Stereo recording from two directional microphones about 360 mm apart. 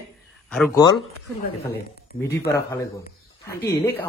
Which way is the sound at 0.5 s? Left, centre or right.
Centre.